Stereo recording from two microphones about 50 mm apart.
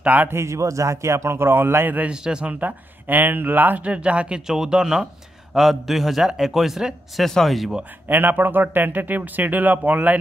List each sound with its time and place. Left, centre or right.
0.0 s speech: right
0.3 s a man's voice: right
2.0 s speech: centre
2.6 s a man's voice: right
3.8 s speech: right
4.5 s a man's voice: centre
7.2 s a man's voice: centre
8.1 s a man's voice: right